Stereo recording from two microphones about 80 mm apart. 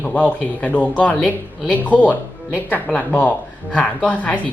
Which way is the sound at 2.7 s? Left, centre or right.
Left.